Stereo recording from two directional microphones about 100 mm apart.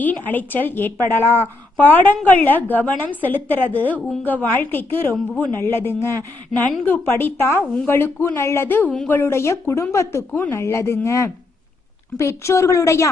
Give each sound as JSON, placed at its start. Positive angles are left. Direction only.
{"t": 0.0, "sound": "a woman's voice", "side_deg": 15}
{"t": 1.2, "sound": "speech", "side_deg": -20}
{"t": 1.7, "sound": "a woman's voice", "side_deg": 15}